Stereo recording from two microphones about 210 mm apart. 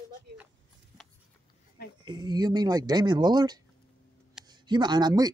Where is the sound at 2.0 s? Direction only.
20° right (ahead or behind).